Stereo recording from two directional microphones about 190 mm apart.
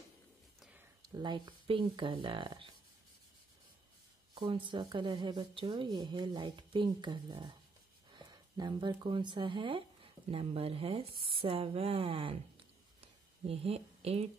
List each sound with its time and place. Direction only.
0.6 s a sound: 5° right (ahead or behind)
1.0 s a woman's voice: 20° right (ahead or behind)
4.4 s a woman's voice: 25° right (ahead or behind)